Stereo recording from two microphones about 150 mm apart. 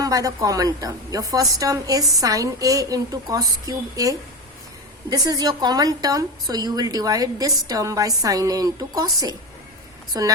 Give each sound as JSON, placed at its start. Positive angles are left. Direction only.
{"t": 0.0, "sound": "a woman's voice", "side_deg": -25}